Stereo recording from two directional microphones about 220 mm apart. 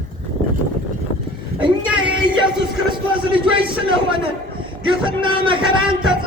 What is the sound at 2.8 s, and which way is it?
A man's voice, 25° right (ahead or behind).